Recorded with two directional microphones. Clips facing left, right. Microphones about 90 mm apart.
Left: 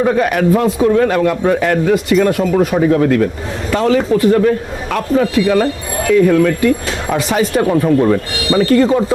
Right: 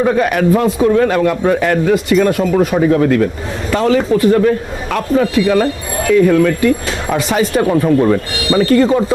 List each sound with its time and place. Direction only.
0.0 s a man's voice: 25° right (ahead or behind)
4.1 s a man's voice: 30° right (ahead or behind)
8.9 s speech: 35° right (ahead or behind)